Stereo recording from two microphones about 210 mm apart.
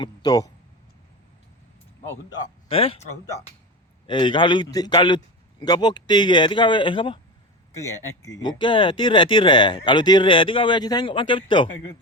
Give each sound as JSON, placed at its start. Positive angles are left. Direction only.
{"t": 0.0, "sound": "speech", "side_deg": 20}
{"t": 2.6, "sound": "speech", "side_deg": 25}
{"t": 8.2, "sound": "speech", "side_deg": 15}